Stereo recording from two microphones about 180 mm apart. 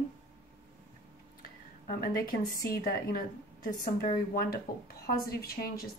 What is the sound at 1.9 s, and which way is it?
A woman's voice, 55° left (ahead or behind).